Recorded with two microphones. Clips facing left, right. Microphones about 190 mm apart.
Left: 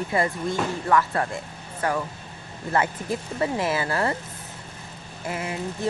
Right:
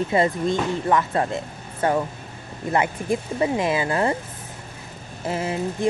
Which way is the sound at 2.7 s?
15° right (ahead or behind).